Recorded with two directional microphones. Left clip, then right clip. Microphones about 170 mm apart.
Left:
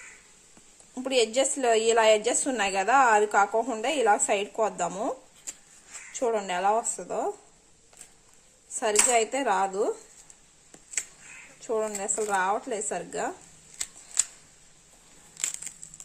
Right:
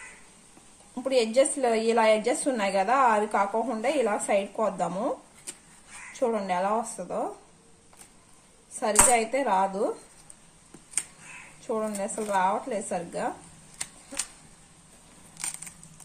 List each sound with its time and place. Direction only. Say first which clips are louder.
1.0 s a woman's voice: right 2 dB; 40° left (ahead or behind)
6.1 s a woman's voice: right 1 dB; 40° left (ahead or behind)
8.7 s speech: right 1 dB; 45° left (ahead or behind)
11.6 s speech: left 1 dB; 40° left (ahead or behind)